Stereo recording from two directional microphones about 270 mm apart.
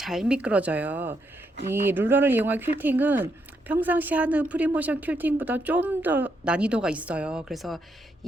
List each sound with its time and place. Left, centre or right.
0.0 s a woman's voice: centre
8.2 s beatboxing: centre